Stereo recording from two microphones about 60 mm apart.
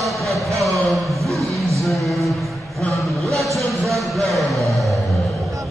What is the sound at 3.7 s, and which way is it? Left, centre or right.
Music, centre.